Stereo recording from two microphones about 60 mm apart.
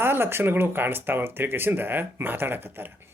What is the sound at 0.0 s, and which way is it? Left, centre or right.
Speech, right.